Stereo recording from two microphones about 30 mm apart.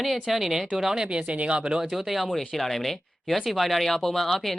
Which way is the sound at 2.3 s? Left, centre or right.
Centre.